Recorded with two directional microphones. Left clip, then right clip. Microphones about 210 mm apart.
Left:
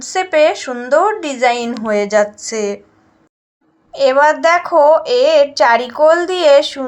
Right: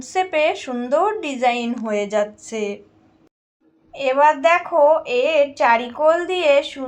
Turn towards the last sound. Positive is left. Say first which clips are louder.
# left 7 dB
turn(degrees=35)  # may be behind; listen again after turning